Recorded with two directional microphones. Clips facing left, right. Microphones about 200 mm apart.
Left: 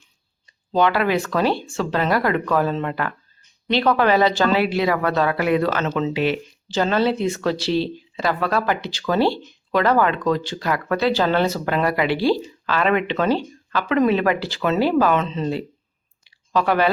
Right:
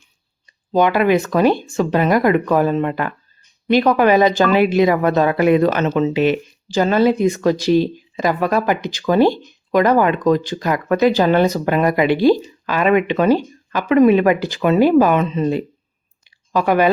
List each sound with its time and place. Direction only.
0.7 s speech: 15° right (ahead or behind)
16.2 s clicking: 10° right (ahead or behind)